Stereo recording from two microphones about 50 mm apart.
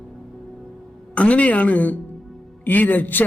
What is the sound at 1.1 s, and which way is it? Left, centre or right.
A man's voice, left.